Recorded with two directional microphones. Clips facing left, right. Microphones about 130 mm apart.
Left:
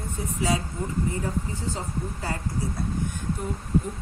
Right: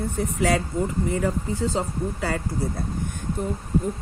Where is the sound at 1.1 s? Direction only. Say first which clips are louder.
Right 5 dB; 85° right.